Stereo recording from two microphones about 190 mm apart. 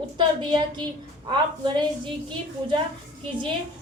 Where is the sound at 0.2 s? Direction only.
25° right (ahead or behind).